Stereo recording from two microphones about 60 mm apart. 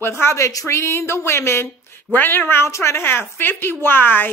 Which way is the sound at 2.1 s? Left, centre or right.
Left.